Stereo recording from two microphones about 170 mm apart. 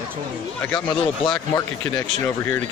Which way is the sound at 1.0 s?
25° left (ahead or behind).